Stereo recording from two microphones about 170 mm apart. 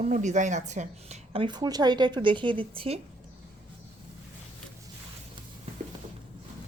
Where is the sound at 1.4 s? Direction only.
25° right (ahead or behind).